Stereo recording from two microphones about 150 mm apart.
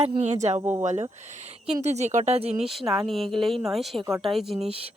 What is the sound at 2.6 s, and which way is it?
Speech, centre (ahead or behind).